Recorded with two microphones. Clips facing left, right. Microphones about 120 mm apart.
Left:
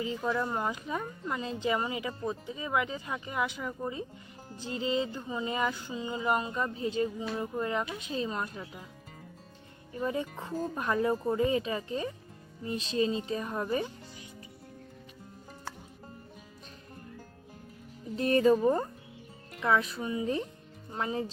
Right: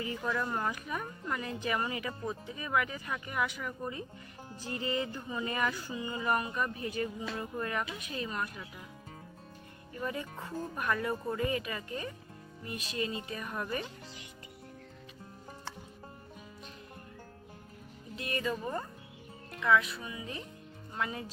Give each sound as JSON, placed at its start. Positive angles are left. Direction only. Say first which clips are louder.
{"t": 0.0, "sound": "music", "louder": "left 3 dB", "side_deg": 20}
{"t": 9.9, "sound": "music", "louder": "left 5 dB", "side_deg": 25}
{"t": 18.2, "sound": "speech", "louder": "left 12 dB", "side_deg": 35}
{"t": 20.9, "sound": "music", "louder": "left 4 dB", "side_deg": 25}